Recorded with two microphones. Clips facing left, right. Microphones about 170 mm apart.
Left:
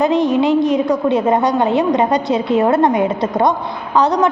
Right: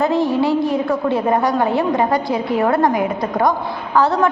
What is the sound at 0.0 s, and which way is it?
A woman's voice, 20° left (ahead or behind).